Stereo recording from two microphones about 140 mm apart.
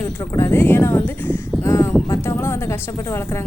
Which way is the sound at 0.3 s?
20° left (ahead or behind).